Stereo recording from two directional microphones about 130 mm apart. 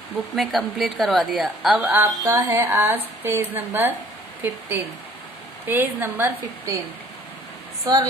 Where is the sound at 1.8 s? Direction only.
15° right (ahead or behind).